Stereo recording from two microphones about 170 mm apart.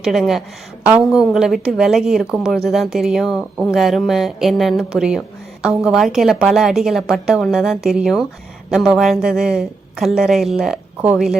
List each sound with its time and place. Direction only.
0.0 s a woman's voice: centre (ahead or behind)